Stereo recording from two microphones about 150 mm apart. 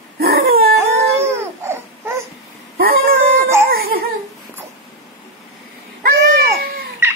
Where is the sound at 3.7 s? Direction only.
85° right.